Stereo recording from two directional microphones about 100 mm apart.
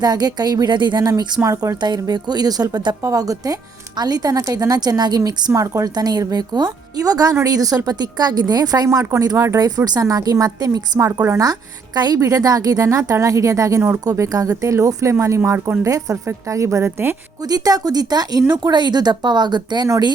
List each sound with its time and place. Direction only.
0.0 s speech: 40° right (ahead or behind)
2.0 s speech: 45° right (ahead or behind); by 17.2 s 25° right (ahead or behind)
17.5 s speech: 40° right (ahead or behind)